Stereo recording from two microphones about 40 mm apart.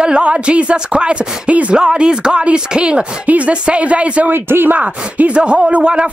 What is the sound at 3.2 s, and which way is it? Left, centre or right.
Speech, right.